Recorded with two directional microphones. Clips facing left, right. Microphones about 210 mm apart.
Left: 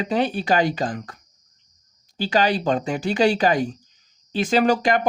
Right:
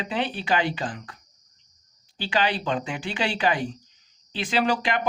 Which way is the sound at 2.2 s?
40° left (ahead or behind).